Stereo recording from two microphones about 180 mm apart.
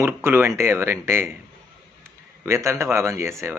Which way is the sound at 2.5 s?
15° right (ahead or behind).